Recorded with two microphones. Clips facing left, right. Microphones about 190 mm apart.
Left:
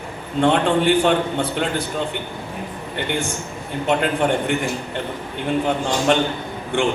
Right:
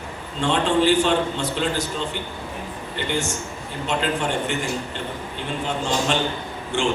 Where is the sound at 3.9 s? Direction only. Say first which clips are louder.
Left 5 dB; 55° left (ahead or behind).